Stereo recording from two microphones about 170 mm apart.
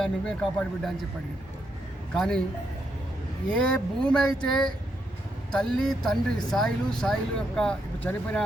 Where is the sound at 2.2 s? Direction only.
5° left (ahead or behind).